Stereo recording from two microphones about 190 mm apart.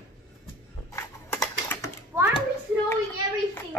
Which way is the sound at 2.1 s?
10° right (ahead or behind).